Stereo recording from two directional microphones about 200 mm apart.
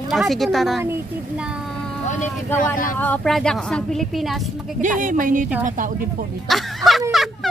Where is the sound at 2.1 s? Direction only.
40° left (ahead or behind).